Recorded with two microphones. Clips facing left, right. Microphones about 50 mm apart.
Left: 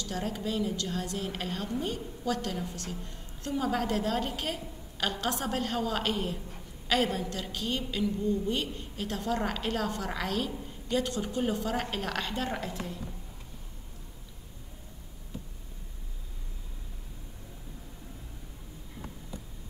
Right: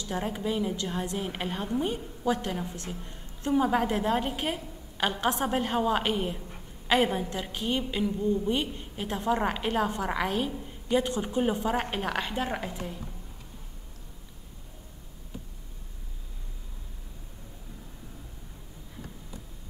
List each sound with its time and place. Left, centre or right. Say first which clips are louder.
0.0 s a woman's voice: right 3 dB; right